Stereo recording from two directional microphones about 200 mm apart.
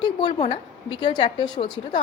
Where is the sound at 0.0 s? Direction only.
25° left (ahead or behind).